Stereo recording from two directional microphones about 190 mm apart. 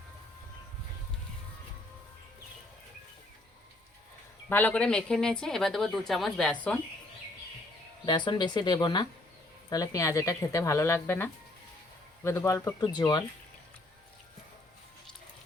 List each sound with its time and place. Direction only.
4.4 s speech: 10° left (ahead or behind)
8.0 s speech: 25° left (ahead or behind)